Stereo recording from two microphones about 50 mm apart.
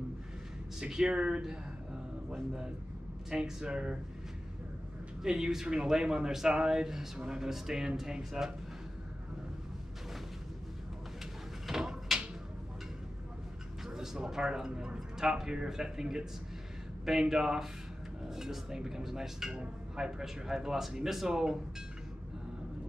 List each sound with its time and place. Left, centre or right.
0.7 s speech: centre
3.3 s speech: centre
5.2 s speech: centre
11.6 s a sound: centre
13.8 s speech: centre
19.5 s speech: centre